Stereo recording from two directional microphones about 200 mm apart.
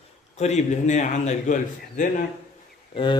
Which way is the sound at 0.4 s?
35° left (ahead or behind).